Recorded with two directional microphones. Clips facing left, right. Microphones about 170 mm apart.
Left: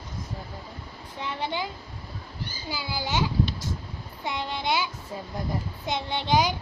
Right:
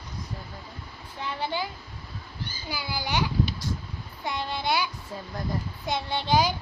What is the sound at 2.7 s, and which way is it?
Speech, 15° right (ahead or behind).